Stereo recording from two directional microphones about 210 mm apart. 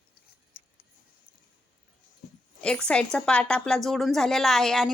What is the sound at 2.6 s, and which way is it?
A woman's voice, 5° left (ahead or behind).